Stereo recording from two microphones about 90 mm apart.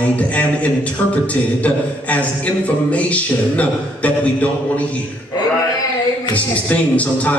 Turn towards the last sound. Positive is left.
turn(degrees=15)  # may be behind; listen again after turning